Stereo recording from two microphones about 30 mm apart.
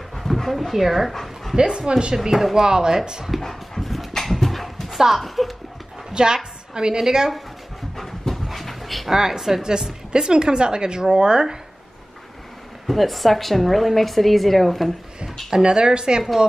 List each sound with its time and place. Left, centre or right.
0.1 s speech: centre
1.6 s speech: right
3.3 s speech: centre
3.8 s dog: centre
4.8 s dog: centre
5.2 s speech: centre
6.1 s a woman's voice: right
7.9 s dog: centre
9.1 s a woman's voice: centre
12.8 s a woman's voice: centre
15.6 s speech: right